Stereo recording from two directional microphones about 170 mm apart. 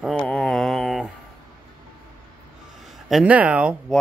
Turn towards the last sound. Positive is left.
turn(degrees=-5)  # may be behind; listen again after turning